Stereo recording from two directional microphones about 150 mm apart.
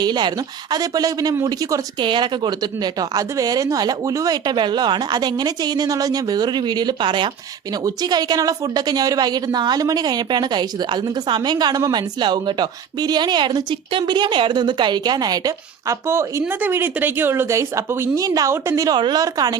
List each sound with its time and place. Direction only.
0.0 s a woman's voice: 30° right (ahead or behind)